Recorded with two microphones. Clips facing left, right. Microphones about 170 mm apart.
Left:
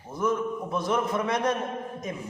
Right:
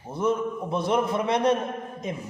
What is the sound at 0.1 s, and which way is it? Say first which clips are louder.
A man's voice: right 2 dB; 30° right (ahead or behind).